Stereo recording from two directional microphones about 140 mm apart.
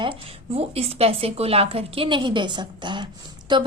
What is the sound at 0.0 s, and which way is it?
A woman's voice, 40° right (ahead or behind).